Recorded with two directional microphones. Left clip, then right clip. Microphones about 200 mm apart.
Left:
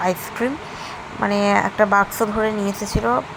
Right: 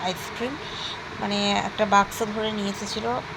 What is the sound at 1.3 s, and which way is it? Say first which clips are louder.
Speech: left 6 dB; 80° left.